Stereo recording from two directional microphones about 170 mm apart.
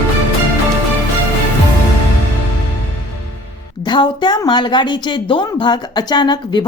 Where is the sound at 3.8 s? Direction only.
25° left (ahead or behind).